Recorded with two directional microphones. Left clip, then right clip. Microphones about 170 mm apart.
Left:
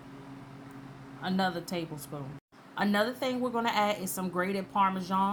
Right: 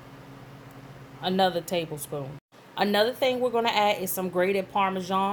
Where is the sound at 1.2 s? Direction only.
35° right (ahead or behind).